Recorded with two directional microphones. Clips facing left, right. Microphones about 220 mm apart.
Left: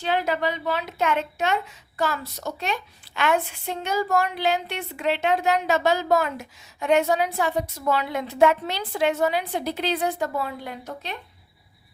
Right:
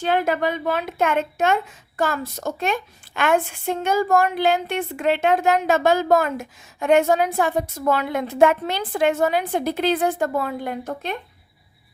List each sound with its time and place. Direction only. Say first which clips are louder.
0.0 s a woman's voice: right 3 dB; 50° right (ahead or behind)